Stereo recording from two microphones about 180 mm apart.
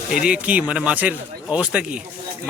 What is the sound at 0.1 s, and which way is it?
Speech, 5° right (ahead or behind).